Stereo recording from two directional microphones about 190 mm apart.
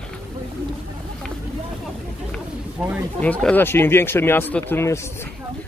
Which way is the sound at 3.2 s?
5° left (ahead or behind).